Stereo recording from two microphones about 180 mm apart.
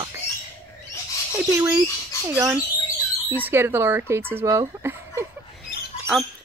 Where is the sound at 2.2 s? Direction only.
15° right (ahead or behind).